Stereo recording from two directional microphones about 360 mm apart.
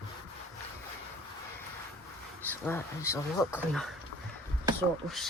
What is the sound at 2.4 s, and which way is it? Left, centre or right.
Speech, centre.